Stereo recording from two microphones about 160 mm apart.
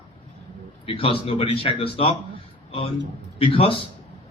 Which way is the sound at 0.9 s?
35° left (ahead or behind).